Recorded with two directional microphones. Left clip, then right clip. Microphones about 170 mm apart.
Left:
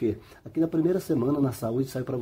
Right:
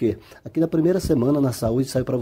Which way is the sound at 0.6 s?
35° right (ahead or behind).